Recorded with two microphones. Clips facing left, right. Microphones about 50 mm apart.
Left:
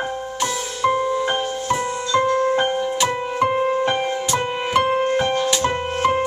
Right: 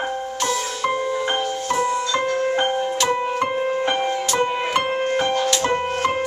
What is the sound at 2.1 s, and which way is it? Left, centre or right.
Music, right.